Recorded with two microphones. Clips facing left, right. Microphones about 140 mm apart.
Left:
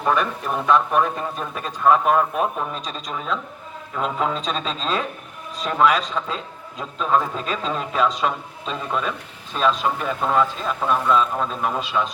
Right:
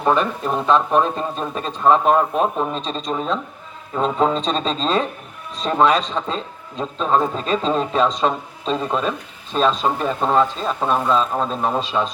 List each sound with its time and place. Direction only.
0.0 s a man's voice: 25° right (ahead or behind)